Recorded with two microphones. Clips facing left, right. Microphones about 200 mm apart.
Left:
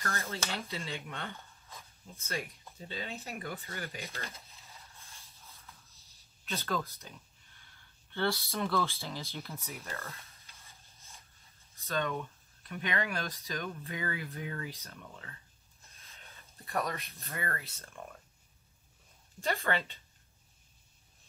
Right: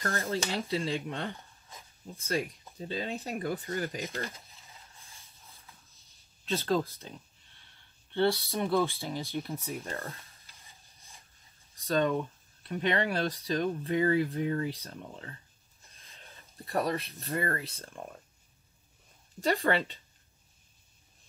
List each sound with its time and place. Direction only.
0.0 s speech: 30° right (ahead or behind)
5.4 s a sound: 15° right (ahead or behind)
6.4 s speech: 30° right (ahead or behind)
8.1 s speech: 20° right (ahead or behind)
9.5 s speech: 30° right (ahead or behind)
10.6 s a sound: 15° right (ahead or behind)
11.9 s speech: 35° right (ahead or behind)
19.4 s speech: 35° right (ahead or behind)